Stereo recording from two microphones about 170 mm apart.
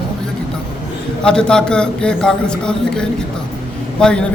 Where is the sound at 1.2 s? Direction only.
5° left (ahead or behind).